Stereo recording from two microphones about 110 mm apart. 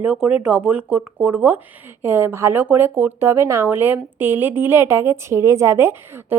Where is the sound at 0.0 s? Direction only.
10° right (ahead or behind).